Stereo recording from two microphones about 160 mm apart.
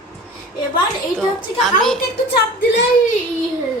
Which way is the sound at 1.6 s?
Centre (ahead or behind).